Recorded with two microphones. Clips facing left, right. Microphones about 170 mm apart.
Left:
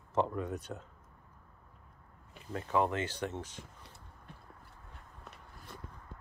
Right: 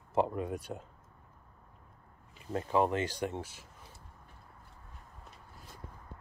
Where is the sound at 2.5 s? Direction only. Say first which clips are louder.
Right 2 dB; 30° right (ahead or behind).